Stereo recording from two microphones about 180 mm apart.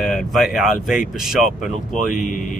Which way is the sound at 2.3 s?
45° left (ahead or behind).